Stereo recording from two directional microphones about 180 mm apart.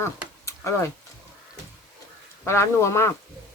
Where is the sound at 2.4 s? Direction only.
15° left (ahead or behind).